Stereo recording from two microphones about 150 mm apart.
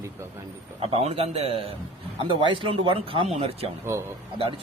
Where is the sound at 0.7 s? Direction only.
40° right (ahead or behind).